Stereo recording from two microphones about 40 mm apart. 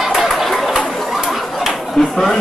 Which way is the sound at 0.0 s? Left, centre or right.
Centre.